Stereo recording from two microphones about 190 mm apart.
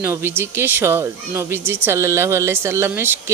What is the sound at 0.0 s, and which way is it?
Speech, 10° right (ahead or behind).